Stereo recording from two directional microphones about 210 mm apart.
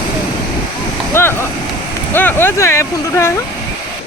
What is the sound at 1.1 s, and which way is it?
Speech, 10° left (ahead or behind).